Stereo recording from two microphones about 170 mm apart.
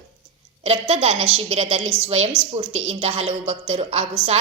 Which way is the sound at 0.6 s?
35° right (ahead or behind).